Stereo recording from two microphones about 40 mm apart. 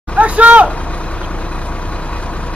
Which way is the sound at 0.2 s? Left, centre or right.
Right.